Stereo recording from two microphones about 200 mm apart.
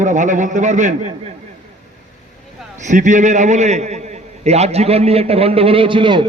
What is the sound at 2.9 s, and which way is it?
A man's voice, 35° right (ahead or behind).